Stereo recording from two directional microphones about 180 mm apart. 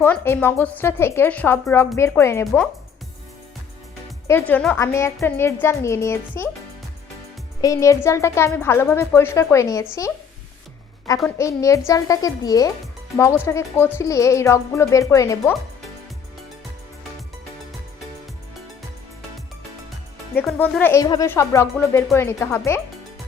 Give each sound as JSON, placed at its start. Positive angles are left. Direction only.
{"t": 0.0, "sound": "speech", "side_deg": 10}
{"t": 4.3, "sound": "speech", "side_deg": 10}
{"t": 7.6, "sound": "speech", "side_deg": 20}
{"t": 11.3, "sound": "speech", "side_deg": 15}
{"t": 20.3, "sound": "speech", "side_deg": 5}